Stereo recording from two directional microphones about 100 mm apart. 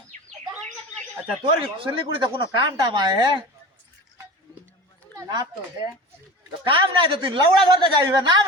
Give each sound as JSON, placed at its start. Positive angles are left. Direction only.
{"t": 1.8, "sound": "speech", "side_deg": -55}
{"t": 5.1, "sound": "speech", "side_deg": -40}
{"t": 6.7, "sound": "speech", "side_deg": -55}